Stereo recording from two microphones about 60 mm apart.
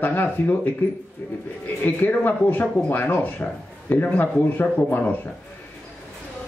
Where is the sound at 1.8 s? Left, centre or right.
Left.